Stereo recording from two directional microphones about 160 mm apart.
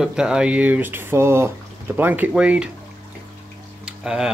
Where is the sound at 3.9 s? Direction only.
5° right (ahead or behind).